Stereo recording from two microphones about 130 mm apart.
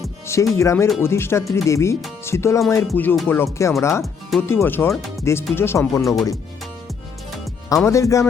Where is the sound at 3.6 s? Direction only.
20° left (ahead or behind).